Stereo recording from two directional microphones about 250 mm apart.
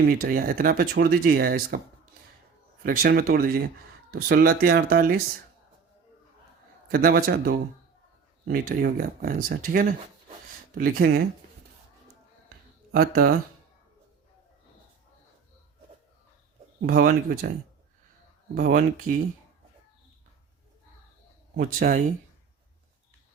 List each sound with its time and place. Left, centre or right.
0.0 s speech: right
2.8 s speech: right
6.8 s speech: right
12.9 s speech: right
16.8 s speech: right
18.5 s speech: right
21.5 s speech: right